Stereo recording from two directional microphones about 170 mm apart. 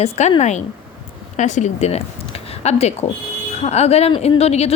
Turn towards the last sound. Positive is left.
turn(degrees=40)  # may be behind; listen again after turning